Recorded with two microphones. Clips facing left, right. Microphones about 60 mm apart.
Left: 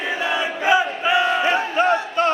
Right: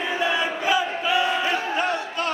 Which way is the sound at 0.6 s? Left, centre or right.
Left.